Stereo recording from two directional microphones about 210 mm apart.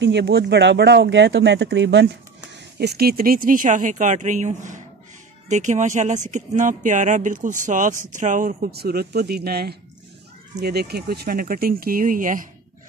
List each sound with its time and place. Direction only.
0.0 s speech: 55° right (ahead or behind)